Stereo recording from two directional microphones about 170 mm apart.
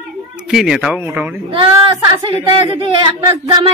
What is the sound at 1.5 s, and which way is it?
Speech, 30° right (ahead or behind).